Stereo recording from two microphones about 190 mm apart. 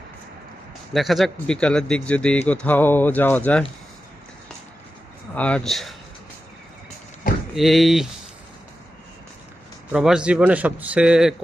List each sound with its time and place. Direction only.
0.9 s a man's voice: centre (ahead or behind)
5.3 s a man's voice: 5° left (ahead or behind)
7.5 s a man's voice: centre (ahead or behind)
9.9 s a man's voice: 5° right (ahead or behind)